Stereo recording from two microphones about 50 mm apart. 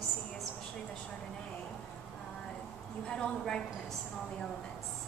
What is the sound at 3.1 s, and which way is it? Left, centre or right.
Speech, centre.